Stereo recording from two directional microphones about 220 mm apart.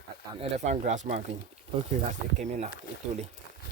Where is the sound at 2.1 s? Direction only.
35° right (ahead or behind).